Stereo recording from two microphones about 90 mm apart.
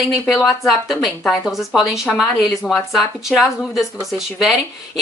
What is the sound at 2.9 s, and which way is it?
A woman's voice, 5° right (ahead or behind).